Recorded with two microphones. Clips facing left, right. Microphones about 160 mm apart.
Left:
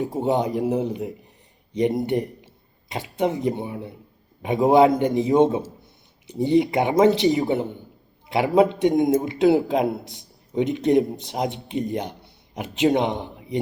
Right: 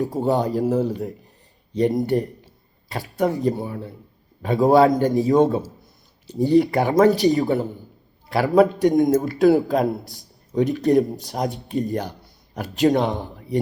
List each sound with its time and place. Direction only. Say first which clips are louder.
0.1 s a man's voice: right 1 dB; 20° left (ahead or behind)